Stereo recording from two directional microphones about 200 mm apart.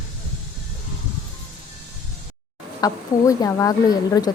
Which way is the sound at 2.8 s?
15° left (ahead or behind).